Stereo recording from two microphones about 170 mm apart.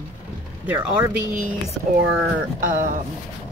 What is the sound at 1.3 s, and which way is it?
Speech, 50° right (ahead or behind).